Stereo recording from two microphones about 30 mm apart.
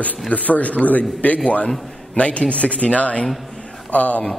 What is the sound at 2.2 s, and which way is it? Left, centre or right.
A man's voice, left.